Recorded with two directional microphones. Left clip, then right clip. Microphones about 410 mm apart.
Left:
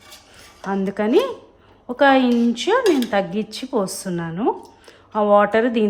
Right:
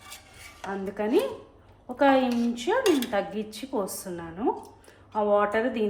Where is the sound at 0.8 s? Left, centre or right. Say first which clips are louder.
Left 7 dB; left.